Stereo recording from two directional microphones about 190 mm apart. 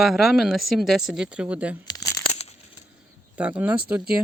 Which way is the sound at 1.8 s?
20° left (ahead or behind).